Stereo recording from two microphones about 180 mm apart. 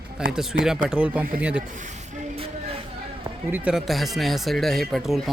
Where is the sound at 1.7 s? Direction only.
45° right (ahead or behind).